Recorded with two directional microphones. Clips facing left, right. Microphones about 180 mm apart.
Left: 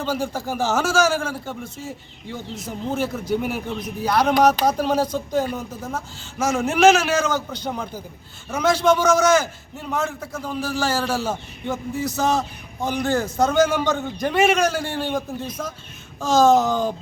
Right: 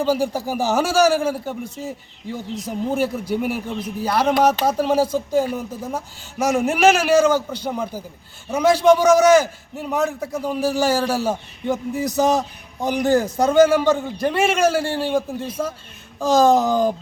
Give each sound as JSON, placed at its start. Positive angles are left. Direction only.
{"t": 0.0, "sound": "a man's voice", "side_deg": -10}
{"t": 2.9, "sound": "a man's voice", "side_deg": -10}